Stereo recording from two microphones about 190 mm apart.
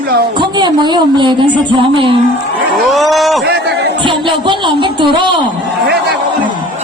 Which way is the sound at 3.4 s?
60° right (ahead or behind).